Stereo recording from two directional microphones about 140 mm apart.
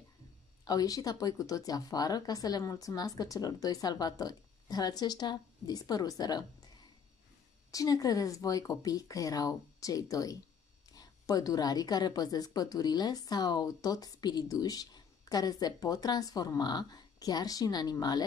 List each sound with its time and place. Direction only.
0.7 s a woman's voice: 25° left (ahead or behind)
7.7 s a woman's voice: 25° left (ahead or behind)